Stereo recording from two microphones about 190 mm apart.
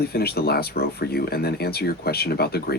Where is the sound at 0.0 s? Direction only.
55° left (ahead or behind).